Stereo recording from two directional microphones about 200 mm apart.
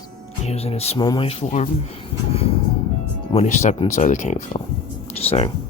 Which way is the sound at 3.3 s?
35° left (ahead or behind).